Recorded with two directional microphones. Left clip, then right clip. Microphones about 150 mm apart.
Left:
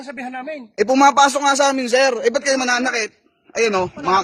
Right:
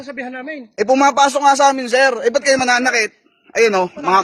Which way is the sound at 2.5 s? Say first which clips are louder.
Right 4 dB; 10° right (ahead or behind).